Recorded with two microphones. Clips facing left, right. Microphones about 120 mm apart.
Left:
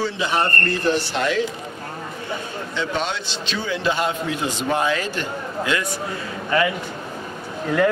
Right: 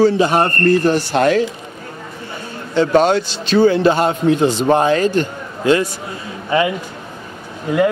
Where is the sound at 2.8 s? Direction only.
45° right (ahead or behind).